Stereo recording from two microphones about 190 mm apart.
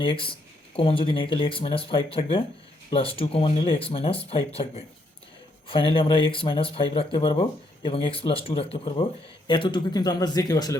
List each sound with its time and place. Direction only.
0.0 s speech: 25° left (ahead or behind)